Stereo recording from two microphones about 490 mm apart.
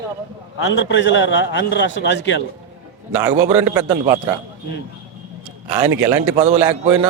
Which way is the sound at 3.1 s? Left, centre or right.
Centre.